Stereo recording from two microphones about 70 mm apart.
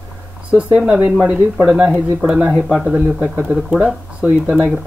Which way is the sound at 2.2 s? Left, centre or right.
Centre.